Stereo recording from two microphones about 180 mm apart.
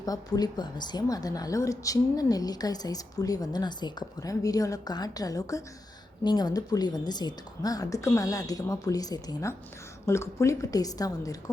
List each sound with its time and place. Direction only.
0.0 s a woman's voice: 20° left (ahead or behind)